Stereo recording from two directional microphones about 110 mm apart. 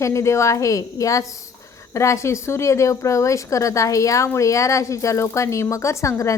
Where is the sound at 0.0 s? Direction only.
25° left (ahead or behind).